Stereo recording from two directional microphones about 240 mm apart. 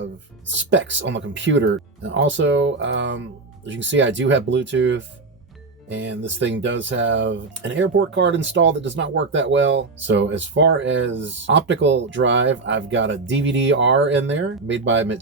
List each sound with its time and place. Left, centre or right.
0.0 s speech: right